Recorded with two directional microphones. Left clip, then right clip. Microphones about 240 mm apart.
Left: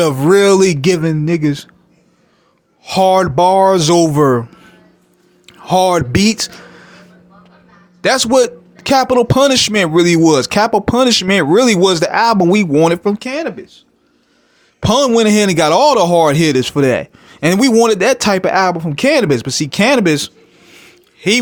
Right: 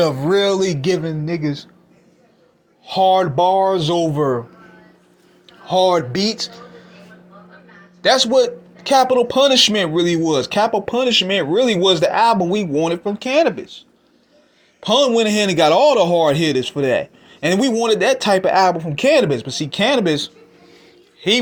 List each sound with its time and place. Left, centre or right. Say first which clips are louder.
0.0 s a man's voice: left 5 dB; left
2.8 s a man's voice: left 3 dB; left
8.0 s a man's voice: left 2 dB; left
13.2 s speech: right 5 dB; centre
14.8 s a man's voice: left 3 dB; left